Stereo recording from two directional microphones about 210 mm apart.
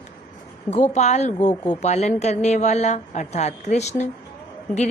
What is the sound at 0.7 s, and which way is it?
A woman's voice, 35° left (ahead or behind).